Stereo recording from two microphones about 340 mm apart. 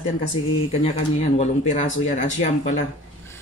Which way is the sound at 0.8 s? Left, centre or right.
Centre.